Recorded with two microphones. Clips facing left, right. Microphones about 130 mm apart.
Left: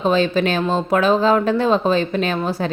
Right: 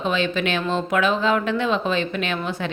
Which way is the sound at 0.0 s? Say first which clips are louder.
Left 6 dB; 35° left (ahead or behind).